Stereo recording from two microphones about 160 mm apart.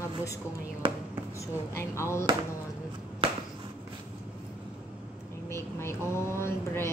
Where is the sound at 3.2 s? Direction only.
35° right (ahead or behind).